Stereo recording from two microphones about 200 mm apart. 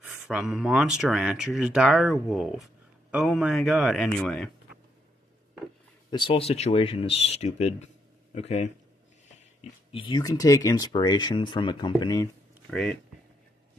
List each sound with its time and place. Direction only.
0.0 s speech: 5° right (ahead or behind)
6.0 s speech: 25° left (ahead or behind)
12.7 s speech: 5° left (ahead or behind)